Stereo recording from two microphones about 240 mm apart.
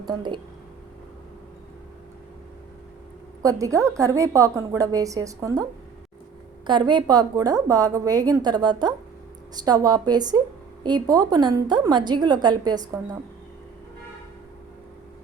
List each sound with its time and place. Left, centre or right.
0.0 s a woman's voice: centre
3.4 s a woman's voice: centre
6.7 s a woman's voice: centre